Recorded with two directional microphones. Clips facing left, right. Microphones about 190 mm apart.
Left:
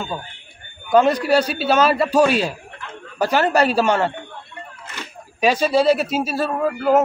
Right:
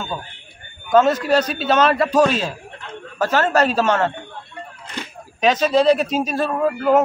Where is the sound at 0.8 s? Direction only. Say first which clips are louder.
Even; 15° left (ahead or behind).